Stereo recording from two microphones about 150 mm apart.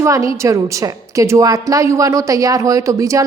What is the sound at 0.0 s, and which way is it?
A woman's voice, 20° right (ahead or behind).